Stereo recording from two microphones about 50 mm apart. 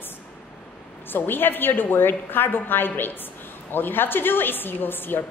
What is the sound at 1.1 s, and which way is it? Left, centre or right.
A woman's voice, left.